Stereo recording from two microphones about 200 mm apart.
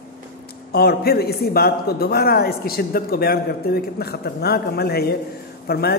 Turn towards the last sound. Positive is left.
turn(degrees=50)  # may be behind; listen again after turning